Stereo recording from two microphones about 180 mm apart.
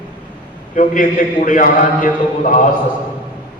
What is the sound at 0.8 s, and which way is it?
A man's voice, 45° left (ahead or behind).